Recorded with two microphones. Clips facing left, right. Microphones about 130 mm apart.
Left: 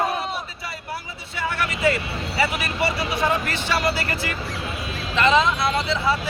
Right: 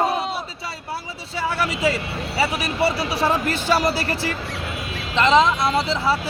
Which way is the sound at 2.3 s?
30° right (ahead or behind).